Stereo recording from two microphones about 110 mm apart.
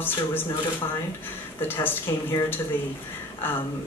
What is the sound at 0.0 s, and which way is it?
Speech, 20° left (ahead or behind).